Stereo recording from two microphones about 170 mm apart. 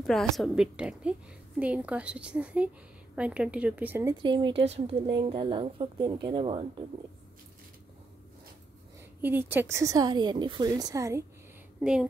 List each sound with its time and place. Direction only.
0.0 s a woman's voice: 5° left (ahead or behind); by 6.6 s 30° right (ahead or behind)
9.2 s speech: 10° right (ahead or behind)
11.8 s a woman's voice: 5° right (ahead or behind)